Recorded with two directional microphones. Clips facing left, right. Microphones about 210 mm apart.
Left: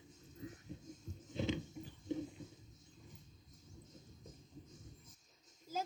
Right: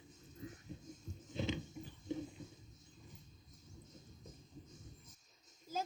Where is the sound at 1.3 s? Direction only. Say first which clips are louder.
Left 2 dB; 55° left (ahead or behind).